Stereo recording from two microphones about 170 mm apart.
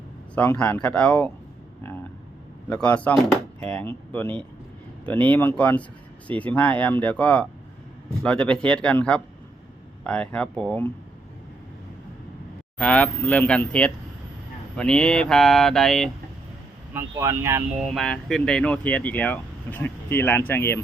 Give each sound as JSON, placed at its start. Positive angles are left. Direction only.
{"t": 0.3, "sound": "speech", "side_deg": 10}
{"t": 2.6, "sound": "speech", "side_deg": 10}
{"t": 12.8, "sound": "speech", "side_deg": 5}
{"t": 16.9, "sound": "speech", "side_deg": -15}
{"t": 17.7, "sound": "speech", "side_deg": 0}